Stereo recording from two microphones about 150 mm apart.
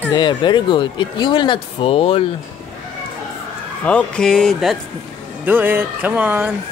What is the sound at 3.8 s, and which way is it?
Speech, 10° left (ahead or behind).